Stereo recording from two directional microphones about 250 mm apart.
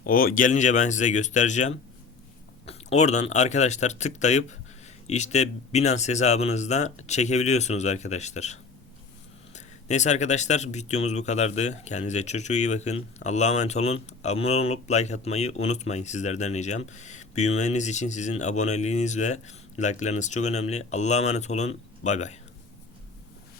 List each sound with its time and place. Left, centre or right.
0.0 s speech: left
9.6 s speech: left